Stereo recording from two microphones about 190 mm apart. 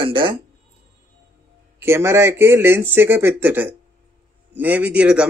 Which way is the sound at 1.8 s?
15° right (ahead or behind).